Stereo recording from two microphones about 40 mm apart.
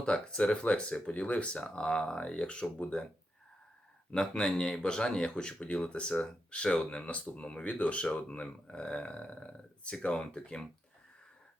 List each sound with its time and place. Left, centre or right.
0.0 s speech: left
4.1 s speech: centre